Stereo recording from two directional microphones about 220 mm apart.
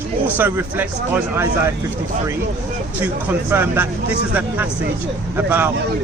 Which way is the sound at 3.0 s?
10° right (ahead or behind).